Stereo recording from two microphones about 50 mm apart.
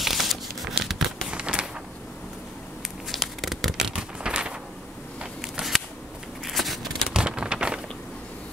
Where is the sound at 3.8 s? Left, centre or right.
Centre.